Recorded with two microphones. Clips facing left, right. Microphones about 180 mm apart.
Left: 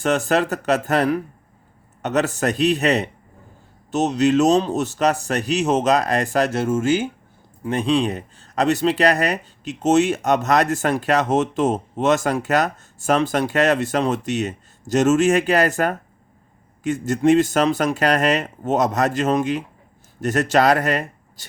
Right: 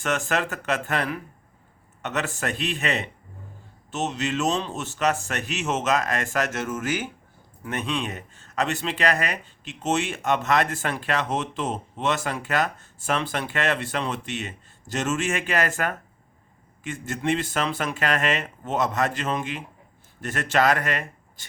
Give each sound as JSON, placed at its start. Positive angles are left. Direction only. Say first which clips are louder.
{"t": 0.0, "sound": "speech", "louder": "left 7 dB", "side_deg": 35}